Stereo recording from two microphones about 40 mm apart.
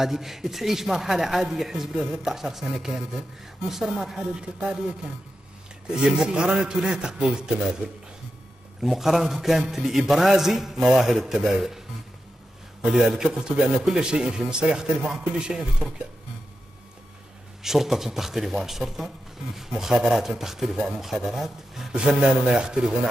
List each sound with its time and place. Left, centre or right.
0.0 s a man's voice: centre
5.9 s a man's voice: centre
8.8 s a man's voice: centre
12.8 s a man's voice: centre
13.2 s speech: centre
17.6 s a man's voice: centre
21.9 s speech: right